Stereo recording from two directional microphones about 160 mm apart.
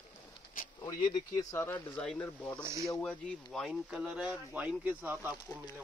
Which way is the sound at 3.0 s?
5° left (ahead or behind).